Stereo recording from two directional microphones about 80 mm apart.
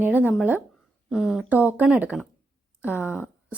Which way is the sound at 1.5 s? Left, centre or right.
Centre.